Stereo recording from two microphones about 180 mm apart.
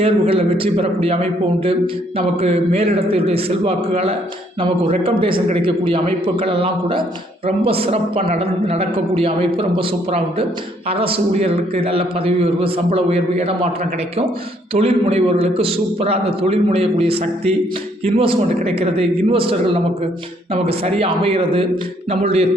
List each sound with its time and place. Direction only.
0.0 s a man's voice: 30° right (ahead or behind)
14.7 s a man's voice: 35° right (ahead or behind)